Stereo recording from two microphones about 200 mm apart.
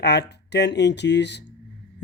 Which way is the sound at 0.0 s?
55° left (ahead or behind).